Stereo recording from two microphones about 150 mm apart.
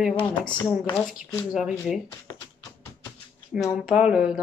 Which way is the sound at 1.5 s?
5° right (ahead or behind).